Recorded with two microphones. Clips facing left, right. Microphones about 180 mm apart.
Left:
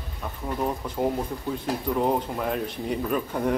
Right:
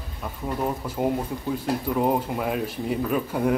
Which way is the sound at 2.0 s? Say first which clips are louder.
Right 1 dB; 5° right (ahead or behind).